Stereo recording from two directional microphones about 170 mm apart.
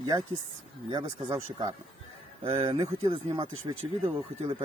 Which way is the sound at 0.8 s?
25° right (ahead or behind).